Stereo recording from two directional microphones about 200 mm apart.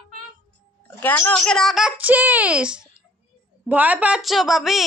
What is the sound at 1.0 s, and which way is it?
Speech, 10° left (ahead or behind).